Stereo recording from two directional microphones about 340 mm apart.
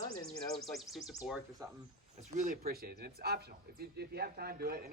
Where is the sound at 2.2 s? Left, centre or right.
Right.